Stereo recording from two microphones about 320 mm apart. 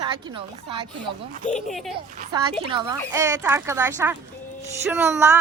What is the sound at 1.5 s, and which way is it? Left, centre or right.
Speech, centre.